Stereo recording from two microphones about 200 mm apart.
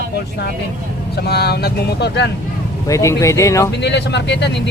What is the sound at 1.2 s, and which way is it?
Speech, 55° left (ahead or behind).